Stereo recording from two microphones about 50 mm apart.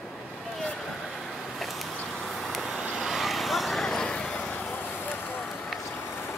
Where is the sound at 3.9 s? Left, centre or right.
Centre.